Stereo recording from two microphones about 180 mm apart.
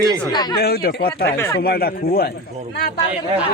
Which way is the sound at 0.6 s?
60° left (ahead or behind).